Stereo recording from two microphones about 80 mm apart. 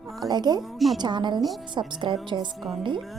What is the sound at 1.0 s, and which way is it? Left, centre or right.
A woman's voice, right.